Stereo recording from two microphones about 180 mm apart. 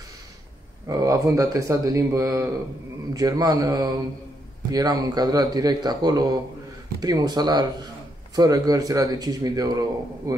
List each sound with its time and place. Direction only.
0.8 s speech: 20° right (ahead or behind)